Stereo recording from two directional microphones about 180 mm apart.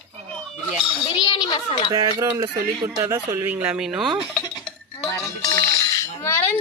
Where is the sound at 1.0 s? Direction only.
25° left (ahead or behind).